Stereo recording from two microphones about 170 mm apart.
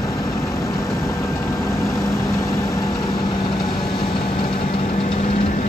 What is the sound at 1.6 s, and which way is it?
Vehicle, 15° left (ahead or behind).